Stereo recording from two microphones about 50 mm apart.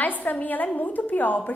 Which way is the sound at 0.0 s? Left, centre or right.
Left.